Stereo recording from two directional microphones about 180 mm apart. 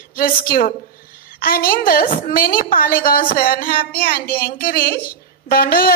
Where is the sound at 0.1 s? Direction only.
55° left (ahead or behind).